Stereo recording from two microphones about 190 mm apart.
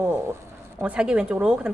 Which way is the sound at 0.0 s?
15° right (ahead or behind).